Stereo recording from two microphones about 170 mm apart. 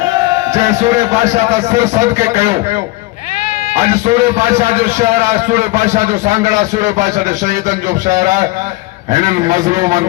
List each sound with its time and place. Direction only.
0.8 s a man's voice: 40° right (ahead or behind)
3.8 s a man's voice: 40° right (ahead or behind)